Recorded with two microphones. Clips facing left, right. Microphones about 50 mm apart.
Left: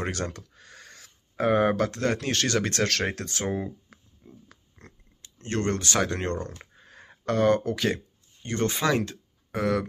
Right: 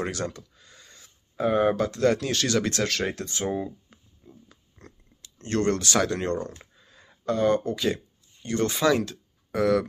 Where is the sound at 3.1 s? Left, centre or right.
Left.